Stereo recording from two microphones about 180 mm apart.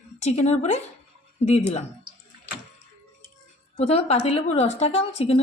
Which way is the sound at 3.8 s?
35° left (ahead or behind).